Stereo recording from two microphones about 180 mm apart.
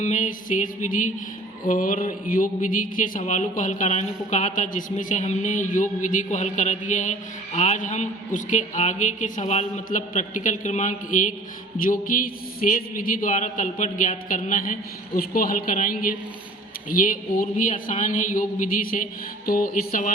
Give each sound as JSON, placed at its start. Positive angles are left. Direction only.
{"t": 0.0, "sound": "a woman's voice", "side_deg": 45}